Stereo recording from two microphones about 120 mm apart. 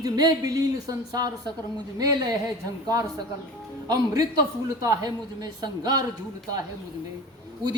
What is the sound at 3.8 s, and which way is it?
Speech, 30° right (ahead or behind).